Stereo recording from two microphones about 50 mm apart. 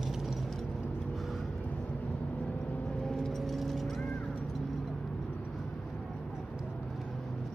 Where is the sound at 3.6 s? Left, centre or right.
Centre.